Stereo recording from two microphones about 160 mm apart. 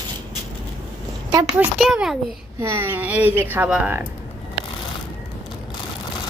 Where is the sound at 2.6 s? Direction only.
15° right (ahead or behind).